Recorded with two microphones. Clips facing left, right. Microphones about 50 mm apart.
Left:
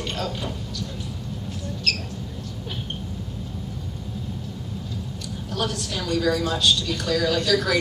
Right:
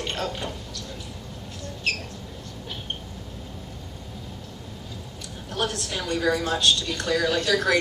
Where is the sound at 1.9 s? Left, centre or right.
Right.